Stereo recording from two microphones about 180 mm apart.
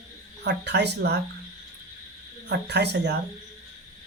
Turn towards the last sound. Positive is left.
turn(degrees=-70)  # may be behind; listen again after turning